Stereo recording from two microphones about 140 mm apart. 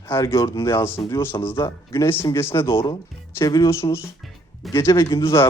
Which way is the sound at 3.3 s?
25° left (ahead or behind).